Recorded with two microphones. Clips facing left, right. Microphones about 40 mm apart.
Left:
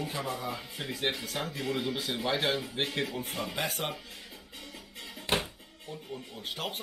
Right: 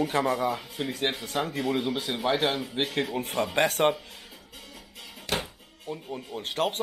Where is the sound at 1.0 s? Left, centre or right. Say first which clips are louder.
Right 4 dB; right.